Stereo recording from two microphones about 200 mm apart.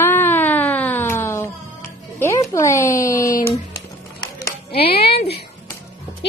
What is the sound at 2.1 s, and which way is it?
Speech, 15° left (ahead or behind).